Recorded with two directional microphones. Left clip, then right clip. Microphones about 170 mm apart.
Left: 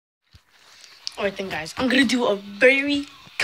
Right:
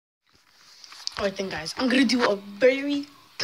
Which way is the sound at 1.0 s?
5° left (ahead or behind).